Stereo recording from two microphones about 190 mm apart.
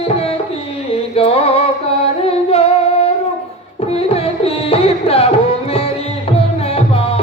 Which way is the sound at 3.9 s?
30° left (ahead or behind).